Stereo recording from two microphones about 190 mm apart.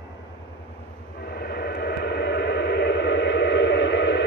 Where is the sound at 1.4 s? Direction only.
55° left (ahead or behind).